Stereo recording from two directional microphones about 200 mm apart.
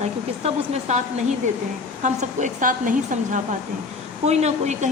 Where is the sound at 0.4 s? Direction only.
35° right (ahead or behind).